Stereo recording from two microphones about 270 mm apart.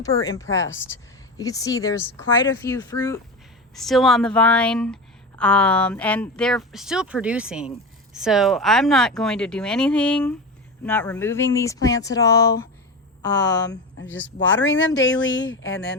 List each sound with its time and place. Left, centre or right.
0.0 s speech: centre
3.8 s speech: centre
13.5 s speech: left